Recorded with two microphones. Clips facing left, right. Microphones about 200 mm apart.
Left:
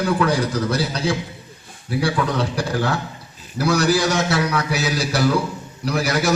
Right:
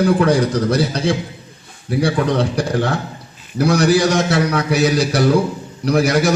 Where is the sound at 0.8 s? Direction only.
55° right (ahead or behind).